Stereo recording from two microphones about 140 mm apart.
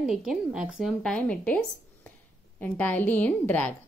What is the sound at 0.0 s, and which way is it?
A woman's voice, 5° right (ahead or behind).